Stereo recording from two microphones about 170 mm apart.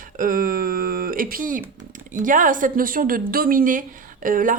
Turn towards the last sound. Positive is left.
turn(degrees=-55)  # may be behind; listen again after turning